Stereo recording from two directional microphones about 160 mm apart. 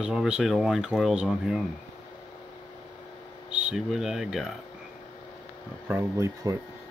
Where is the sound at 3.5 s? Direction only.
5° right (ahead or behind).